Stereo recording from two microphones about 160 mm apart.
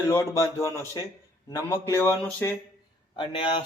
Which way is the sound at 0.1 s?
15° left (ahead or behind).